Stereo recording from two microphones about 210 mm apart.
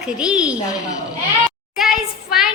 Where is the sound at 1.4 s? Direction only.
Centre (ahead or behind).